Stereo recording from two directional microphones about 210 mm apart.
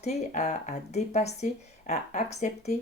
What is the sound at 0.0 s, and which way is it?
Speech, 35° left (ahead or behind).